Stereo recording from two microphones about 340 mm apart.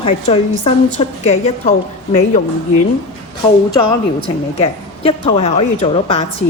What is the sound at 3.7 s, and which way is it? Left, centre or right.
A woman's voice, centre.